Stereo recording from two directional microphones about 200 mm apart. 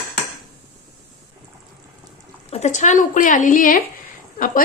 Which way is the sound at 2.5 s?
35° left (ahead or behind).